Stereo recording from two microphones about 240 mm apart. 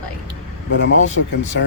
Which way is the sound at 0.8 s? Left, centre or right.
Left.